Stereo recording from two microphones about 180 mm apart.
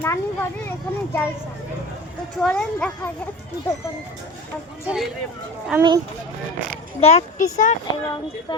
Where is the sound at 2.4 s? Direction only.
5° left (ahead or behind).